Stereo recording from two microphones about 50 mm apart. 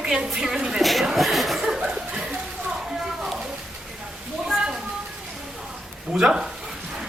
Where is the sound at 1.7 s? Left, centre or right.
Centre.